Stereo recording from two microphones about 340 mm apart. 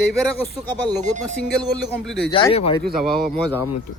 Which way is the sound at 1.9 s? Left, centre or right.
Centre.